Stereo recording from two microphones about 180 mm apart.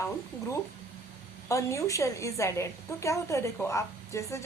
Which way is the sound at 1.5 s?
15° left (ahead or behind).